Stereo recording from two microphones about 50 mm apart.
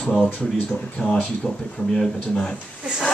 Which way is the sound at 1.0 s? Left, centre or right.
Left.